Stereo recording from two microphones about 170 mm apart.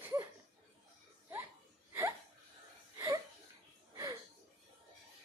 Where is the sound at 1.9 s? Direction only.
15° right (ahead or behind).